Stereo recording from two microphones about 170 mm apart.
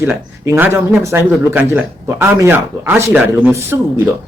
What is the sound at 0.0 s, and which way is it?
Speech, 15° right (ahead or behind).